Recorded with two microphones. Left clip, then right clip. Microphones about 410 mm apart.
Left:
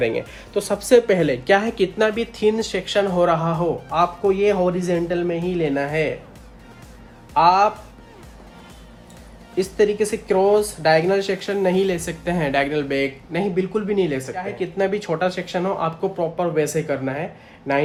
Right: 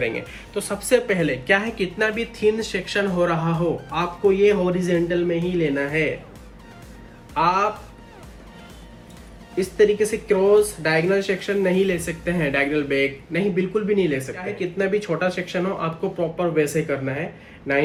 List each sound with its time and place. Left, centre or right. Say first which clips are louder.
0.0 s speech: left 3 dB; left
7.3 s speech: left 5 dB; centre
9.6 s speech: right 1 dB; centre